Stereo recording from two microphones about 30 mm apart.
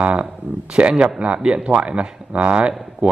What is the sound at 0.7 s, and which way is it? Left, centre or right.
Speech, right.